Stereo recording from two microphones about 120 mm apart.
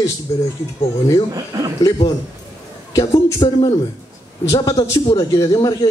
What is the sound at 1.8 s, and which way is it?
A man's voice, 30° left (ahead or behind).